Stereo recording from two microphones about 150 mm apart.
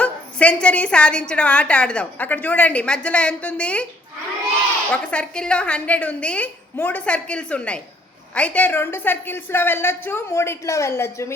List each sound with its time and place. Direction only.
0.0 s a woman's voice: 10° left (ahead or behind)
4.9 s a woman's voice: 5° left (ahead or behind)